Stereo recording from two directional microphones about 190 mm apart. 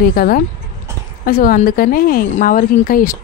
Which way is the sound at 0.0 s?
50° left (ahead or behind).